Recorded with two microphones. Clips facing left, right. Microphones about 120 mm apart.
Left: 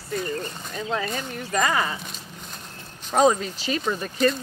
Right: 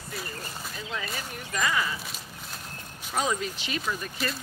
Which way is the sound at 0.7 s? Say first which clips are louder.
Left 9 dB; 45° left (ahead or behind).